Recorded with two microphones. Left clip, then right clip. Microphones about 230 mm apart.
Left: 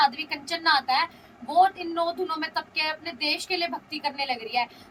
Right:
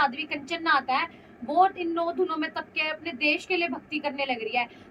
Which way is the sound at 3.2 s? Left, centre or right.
Centre.